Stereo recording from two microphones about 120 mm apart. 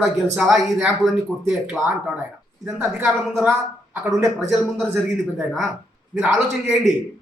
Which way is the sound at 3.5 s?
20° right (ahead or behind).